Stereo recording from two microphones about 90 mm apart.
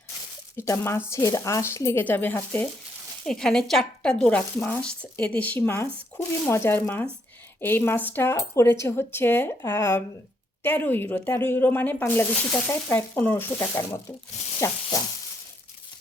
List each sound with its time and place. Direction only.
0.5 s speech: 30° left (ahead or behind)
3.2 s speech: 5° left (ahead or behind); by 14.0 s 25° left (ahead or behind)
14.6 s sizzle: 35° left (ahead or behind)